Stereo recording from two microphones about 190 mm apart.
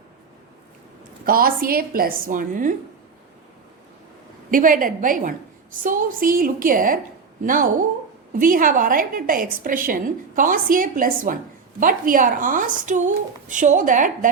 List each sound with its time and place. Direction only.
1.2 s a woman's voice: 50° right (ahead or behind)
4.5 s a woman's voice: 45° right (ahead or behind)